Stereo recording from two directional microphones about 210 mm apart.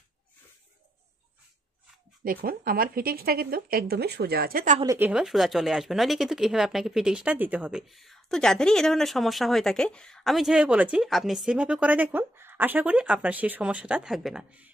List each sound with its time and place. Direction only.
2.2 s speech: 45° right (ahead or behind)
4.8 s speech: 10° right (ahead or behind)